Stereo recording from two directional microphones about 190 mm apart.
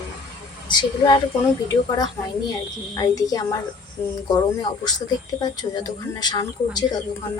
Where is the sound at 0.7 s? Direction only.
20° left (ahead or behind).